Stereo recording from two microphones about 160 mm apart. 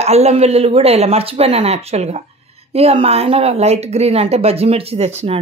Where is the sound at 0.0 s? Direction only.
40° right (ahead or behind).